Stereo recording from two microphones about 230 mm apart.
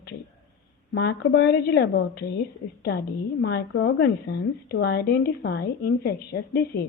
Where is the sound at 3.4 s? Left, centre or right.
Left.